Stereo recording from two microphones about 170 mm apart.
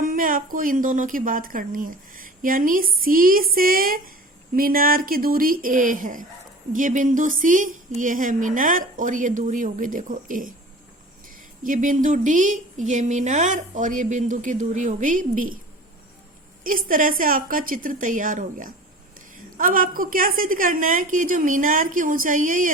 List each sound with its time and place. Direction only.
0.0 s a woman's voice: 55° right (ahead or behind)
11.6 s a woman's voice: 50° right (ahead or behind)
16.6 s a woman's voice: 55° right (ahead or behind)